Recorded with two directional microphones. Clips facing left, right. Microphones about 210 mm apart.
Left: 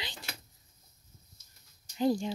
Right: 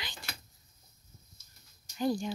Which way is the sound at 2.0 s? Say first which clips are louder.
Left 3 dB; 25° left (ahead or behind).